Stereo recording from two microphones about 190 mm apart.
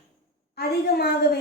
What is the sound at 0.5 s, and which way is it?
Speech, 55° left (ahead or behind).